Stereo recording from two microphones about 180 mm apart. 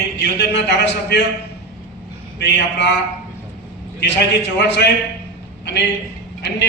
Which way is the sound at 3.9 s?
75° left (ahead or behind).